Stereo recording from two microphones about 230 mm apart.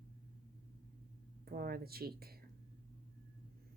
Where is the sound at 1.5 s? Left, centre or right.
Right.